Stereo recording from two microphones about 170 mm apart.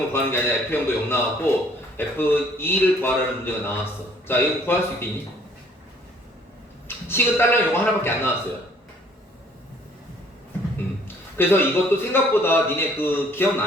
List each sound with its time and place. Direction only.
0.1 s a man's voice: 15° left (ahead or behind)
6.8 s a man's voice: 15° left (ahead or behind)
11.3 s a man's voice: 15° left (ahead or behind)